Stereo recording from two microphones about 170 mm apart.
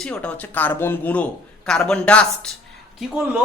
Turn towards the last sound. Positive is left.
turn(degrees=-5)  # may be behind; listen again after turning